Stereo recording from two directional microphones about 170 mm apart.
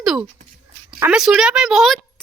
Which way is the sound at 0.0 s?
5° right (ahead or behind).